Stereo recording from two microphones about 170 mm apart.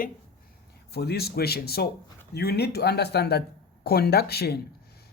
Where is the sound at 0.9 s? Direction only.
70° left (ahead or behind).